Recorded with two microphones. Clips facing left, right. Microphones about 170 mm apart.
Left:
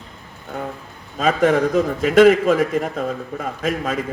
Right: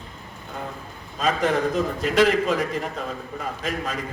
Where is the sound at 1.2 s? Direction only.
50° left (ahead or behind).